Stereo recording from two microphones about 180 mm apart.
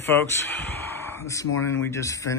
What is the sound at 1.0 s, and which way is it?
Speech, 15° left (ahead or behind).